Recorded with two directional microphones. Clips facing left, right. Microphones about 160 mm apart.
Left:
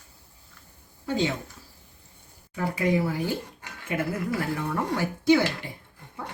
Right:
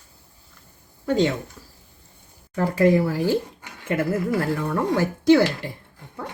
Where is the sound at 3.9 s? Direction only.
55° right (ahead or behind).